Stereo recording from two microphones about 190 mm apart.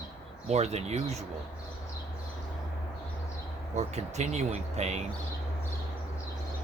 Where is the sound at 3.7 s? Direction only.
35° right (ahead or behind).